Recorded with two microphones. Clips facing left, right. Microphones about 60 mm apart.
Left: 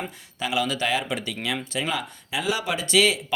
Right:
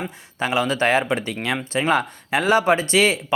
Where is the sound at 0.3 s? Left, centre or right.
Right.